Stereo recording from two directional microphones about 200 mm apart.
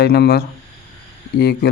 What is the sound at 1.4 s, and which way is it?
Speech, 55° left (ahead or behind).